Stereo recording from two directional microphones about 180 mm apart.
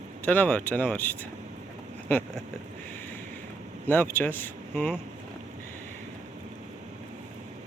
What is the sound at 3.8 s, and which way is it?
Speech, 10° left (ahead or behind).